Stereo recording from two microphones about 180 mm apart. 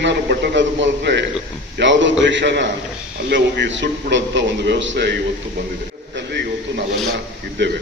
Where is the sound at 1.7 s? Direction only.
90° right.